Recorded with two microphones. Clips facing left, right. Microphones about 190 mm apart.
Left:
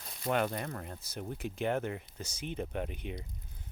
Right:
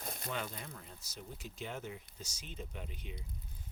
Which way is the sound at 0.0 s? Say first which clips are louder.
Right 6 dB; 50° right (ahead or behind).